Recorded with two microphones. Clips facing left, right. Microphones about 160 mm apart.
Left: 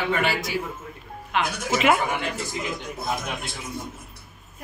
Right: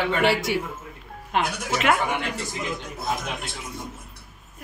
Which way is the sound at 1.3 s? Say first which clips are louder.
Right 1 dB; 45° right (ahead or behind).